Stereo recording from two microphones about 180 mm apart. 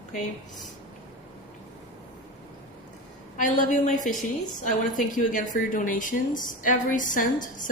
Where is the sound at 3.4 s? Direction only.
45° left (ahead or behind).